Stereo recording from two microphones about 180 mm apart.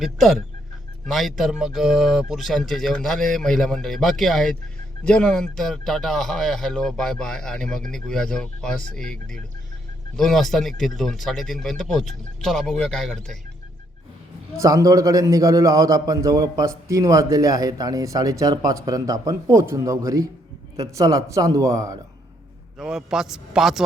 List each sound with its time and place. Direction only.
0.0 s speech: centre (ahead or behind)
14.6 s a man's voice: 20° right (ahead or behind)
22.8 s speech: 5° right (ahead or behind)